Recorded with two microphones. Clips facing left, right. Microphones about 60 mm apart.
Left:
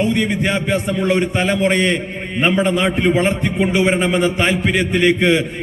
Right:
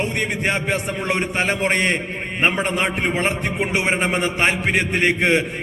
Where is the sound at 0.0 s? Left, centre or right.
Right.